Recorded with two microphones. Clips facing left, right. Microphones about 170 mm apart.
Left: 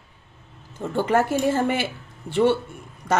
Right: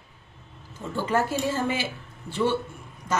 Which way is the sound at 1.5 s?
60° left (ahead or behind).